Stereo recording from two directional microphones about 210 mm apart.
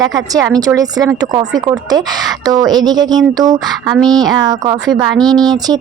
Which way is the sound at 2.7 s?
20° right (ahead or behind).